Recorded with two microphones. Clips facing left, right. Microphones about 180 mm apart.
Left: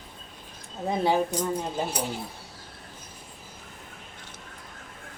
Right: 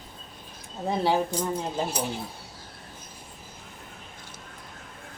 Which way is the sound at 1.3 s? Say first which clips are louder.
Left 1 dB; 30° right (ahead or behind).